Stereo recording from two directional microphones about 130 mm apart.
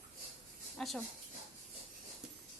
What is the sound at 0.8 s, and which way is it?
Speech, 5° left (ahead or behind).